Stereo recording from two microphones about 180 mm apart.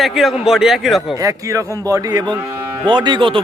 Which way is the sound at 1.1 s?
20° right (ahead or behind).